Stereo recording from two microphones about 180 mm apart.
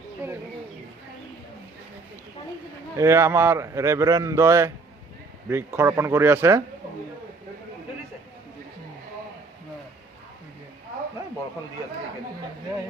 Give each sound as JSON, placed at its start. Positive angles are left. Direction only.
{"t": 0.2, "sound": "bird", "side_deg": -15}
{"t": 3.0, "sound": "a man's voice", "side_deg": -15}